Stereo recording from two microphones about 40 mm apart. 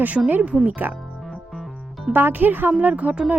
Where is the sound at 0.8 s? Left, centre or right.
Right.